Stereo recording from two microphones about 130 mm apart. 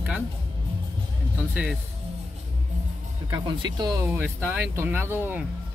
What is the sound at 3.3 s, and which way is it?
Speech, 35° right (ahead or behind).